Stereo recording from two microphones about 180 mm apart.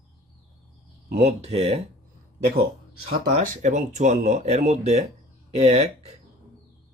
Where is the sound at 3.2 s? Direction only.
45° right (ahead or behind).